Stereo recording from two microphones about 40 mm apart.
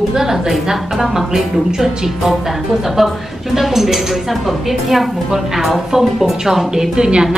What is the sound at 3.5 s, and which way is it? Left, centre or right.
A woman's voice, centre.